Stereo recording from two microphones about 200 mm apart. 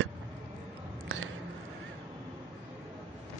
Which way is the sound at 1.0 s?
75° right (ahead or behind).